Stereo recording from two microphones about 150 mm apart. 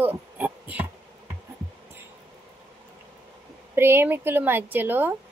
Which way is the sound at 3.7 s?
15° right (ahead or behind).